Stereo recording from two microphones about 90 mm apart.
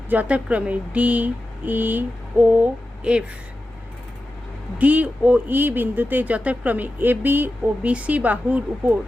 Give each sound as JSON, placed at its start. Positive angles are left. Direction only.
{"t": 0.1, "sound": "speech", "side_deg": -15}
{"t": 4.8, "sound": "speech", "side_deg": -15}